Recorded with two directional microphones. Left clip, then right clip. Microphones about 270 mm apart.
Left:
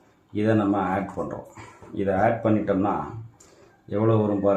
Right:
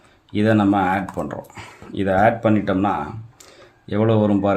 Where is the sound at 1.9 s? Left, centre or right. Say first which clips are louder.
Right 4 dB; right.